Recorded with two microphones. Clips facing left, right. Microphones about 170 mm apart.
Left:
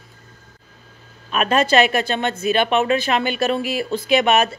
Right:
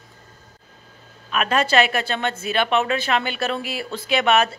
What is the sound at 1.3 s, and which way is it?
Speech, 25° left (ahead or behind).